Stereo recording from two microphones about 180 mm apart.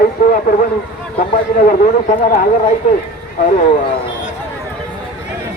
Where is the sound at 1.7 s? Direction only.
50° left (ahead or behind).